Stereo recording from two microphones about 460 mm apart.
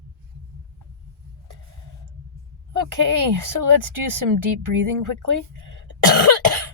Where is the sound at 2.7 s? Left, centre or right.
Right.